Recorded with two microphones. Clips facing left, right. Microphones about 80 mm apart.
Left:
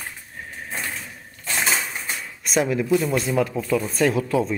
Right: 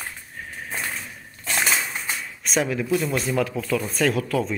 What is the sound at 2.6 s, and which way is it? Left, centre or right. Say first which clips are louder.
Speech: left 4 dB; centre.